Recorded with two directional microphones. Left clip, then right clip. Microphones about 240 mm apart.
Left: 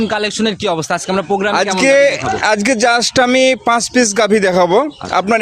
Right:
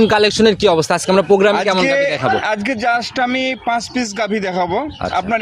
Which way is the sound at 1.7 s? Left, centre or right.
Left.